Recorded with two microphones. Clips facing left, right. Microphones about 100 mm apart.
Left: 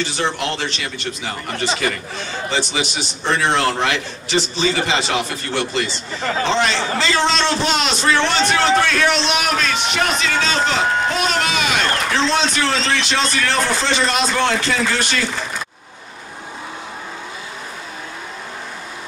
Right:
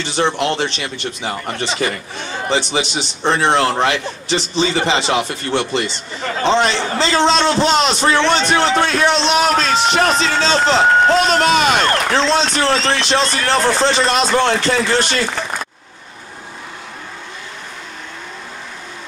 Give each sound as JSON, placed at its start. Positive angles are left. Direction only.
{"t": 0.1, "sound": "a man's voice", "side_deg": -30}
{"t": 3.3, "sound": "a man's voice", "side_deg": -30}